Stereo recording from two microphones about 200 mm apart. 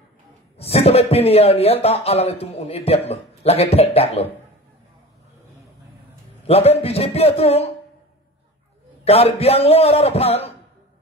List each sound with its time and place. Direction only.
0.6 s speech: 30° left (ahead or behind)
6.4 s speech: 30° left (ahead or behind)
9.0 s speech: 30° left (ahead or behind)